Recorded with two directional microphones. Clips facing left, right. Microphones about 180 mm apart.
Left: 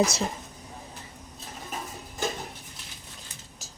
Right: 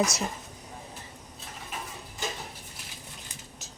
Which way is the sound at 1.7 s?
40° left (ahead or behind).